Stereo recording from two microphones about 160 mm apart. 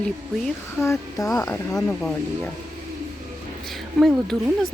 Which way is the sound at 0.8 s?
15° left (ahead or behind).